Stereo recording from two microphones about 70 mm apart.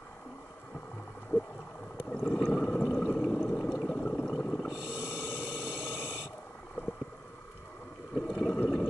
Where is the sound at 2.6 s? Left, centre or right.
Centre.